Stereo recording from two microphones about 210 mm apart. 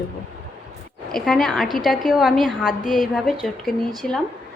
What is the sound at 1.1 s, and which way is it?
A woman's voice, centre (ahead or behind).